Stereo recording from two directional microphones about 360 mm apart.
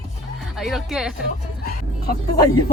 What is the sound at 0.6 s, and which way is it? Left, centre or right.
Speech, centre.